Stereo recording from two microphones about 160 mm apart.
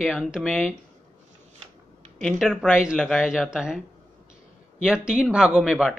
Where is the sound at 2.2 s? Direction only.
Centre (ahead or behind).